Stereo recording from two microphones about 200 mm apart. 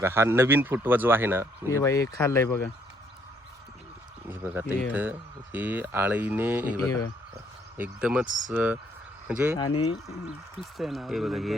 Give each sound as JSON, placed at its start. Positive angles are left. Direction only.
{"t": 0.0, "sound": "speech", "side_deg": -10}
{"t": 1.7, "sound": "speech", "side_deg": 15}
{"t": 4.3, "sound": "speech", "side_deg": -10}
{"t": 7.8, "sound": "speech", "side_deg": -5}
{"t": 8.3, "sound": "speech", "side_deg": -40}
{"t": 8.5, "sound": "speech", "side_deg": -5}
{"t": 9.6, "sound": "speech", "side_deg": 25}
{"t": 10.6, "sound": "speech", "side_deg": 0}